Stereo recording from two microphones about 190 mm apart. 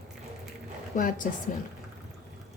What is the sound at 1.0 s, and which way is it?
Speech, 45° left (ahead or behind).